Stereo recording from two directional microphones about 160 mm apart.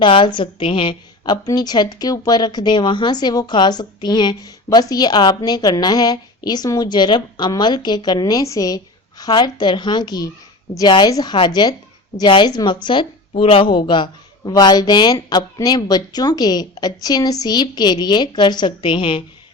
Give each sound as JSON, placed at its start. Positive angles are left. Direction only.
{"t": 0.0, "sound": "a woman's voice", "side_deg": 30}